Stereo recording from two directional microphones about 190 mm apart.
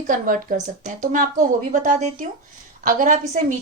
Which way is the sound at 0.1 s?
40° right (ahead or behind).